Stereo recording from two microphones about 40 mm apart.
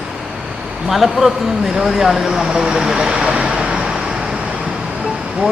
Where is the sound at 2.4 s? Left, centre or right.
Centre.